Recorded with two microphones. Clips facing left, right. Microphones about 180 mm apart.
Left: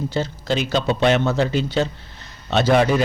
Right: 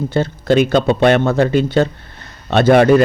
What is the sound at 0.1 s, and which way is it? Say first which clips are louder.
A man's voice: right 8 dB; 55° right (ahead or behind).